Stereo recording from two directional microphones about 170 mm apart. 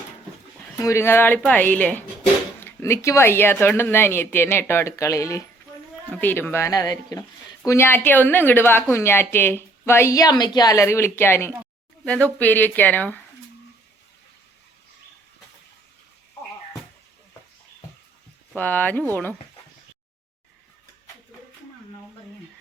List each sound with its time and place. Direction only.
0.8 s a woman's voice: 15° left (ahead or behind)
18.5 s a woman's voice: 10° left (ahead or behind)